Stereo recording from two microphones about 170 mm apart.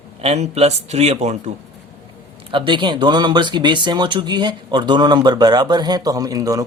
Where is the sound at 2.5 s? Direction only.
30° right (ahead or behind).